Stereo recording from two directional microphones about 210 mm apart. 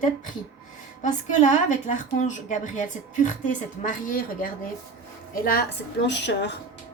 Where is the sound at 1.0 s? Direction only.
35° left (ahead or behind).